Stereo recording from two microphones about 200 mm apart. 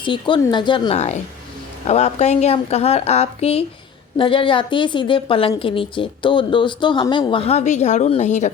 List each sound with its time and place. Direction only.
0.0 s a woman's voice: 25° left (ahead or behind)